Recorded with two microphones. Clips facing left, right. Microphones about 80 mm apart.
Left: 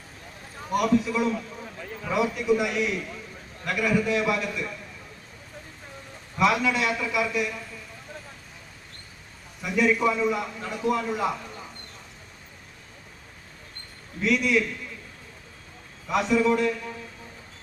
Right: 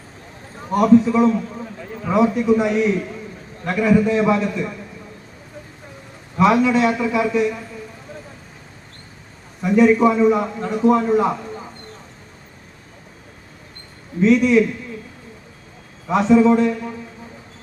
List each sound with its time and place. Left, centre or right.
0.7 s a man's voice: right
6.4 s a man's voice: right
9.6 s a man's voice: right
14.2 s a man's voice: right
16.0 s a man's voice: right